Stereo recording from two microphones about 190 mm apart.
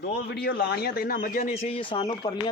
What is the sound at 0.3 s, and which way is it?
A man's voice, 60° left (ahead or behind).